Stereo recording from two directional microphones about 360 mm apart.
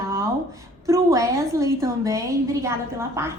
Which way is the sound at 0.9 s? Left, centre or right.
Centre.